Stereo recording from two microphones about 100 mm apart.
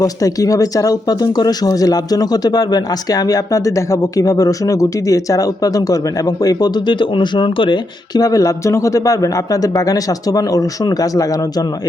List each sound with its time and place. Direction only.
0.0 s speech: 35° left (ahead or behind)